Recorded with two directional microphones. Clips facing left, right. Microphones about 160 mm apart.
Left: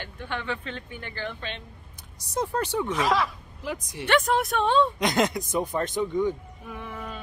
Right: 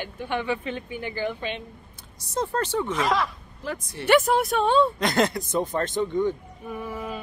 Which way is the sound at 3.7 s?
15° left (ahead or behind).